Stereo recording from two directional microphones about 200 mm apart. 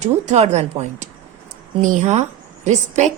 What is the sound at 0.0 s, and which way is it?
A woman's voice, 35° right (ahead or behind).